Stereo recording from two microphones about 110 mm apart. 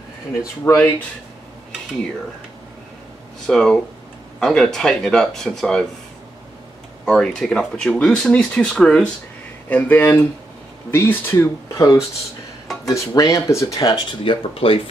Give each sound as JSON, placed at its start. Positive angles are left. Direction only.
{"t": 0.7, "sound": "speech", "side_deg": 15}
{"t": 3.4, "sound": "speech", "side_deg": 5}
{"t": 7.1, "sound": "speech", "side_deg": 5}
{"t": 14.5, "sound": "speech", "side_deg": 60}